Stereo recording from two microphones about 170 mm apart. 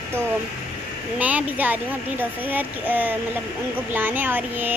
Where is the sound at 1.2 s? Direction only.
10° right (ahead or behind).